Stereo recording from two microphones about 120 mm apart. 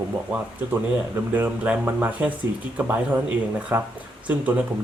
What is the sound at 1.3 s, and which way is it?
Speech, 15° right (ahead or behind).